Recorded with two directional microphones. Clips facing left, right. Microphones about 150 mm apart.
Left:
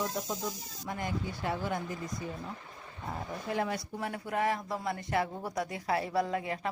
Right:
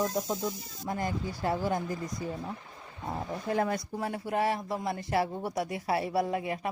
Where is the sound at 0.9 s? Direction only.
40° right (ahead or behind).